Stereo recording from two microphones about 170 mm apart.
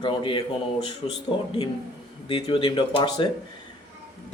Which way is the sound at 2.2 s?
30° left (ahead or behind).